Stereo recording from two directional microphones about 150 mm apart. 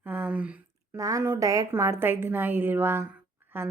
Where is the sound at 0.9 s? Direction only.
20° right (ahead or behind).